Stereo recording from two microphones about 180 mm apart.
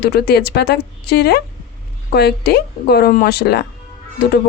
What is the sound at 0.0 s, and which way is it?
A woman's voice, 60° left (ahead or behind).